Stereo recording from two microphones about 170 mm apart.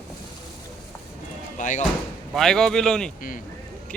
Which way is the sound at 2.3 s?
5° left (ahead or behind).